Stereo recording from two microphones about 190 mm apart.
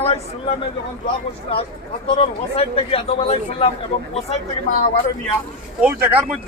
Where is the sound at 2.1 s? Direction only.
30° left (ahead or behind).